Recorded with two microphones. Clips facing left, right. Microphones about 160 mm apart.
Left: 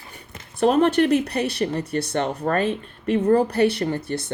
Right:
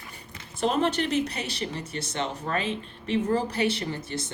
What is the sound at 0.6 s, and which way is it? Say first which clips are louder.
Speech: left 8 dB; 60° left (ahead or behind).